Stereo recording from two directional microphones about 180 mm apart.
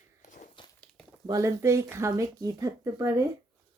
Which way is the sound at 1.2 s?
20° right (ahead or behind).